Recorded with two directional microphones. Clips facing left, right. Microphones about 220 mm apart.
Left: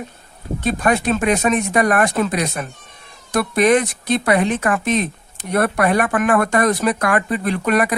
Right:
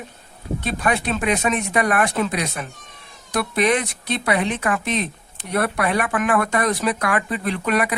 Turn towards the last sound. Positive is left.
turn(degrees=45)  # may be behind; listen again after turning